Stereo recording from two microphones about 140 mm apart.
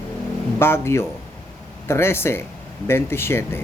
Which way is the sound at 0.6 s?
15° left (ahead or behind).